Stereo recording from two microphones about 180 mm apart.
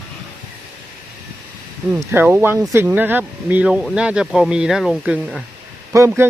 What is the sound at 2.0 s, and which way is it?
Speech, 10° right (ahead or behind).